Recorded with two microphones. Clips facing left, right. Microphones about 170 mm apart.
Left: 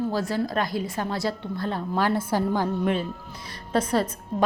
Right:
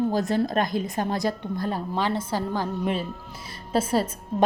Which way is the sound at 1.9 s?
10° left (ahead or behind).